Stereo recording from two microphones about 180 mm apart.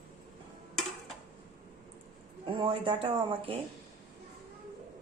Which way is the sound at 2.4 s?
30° right (ahead or behind).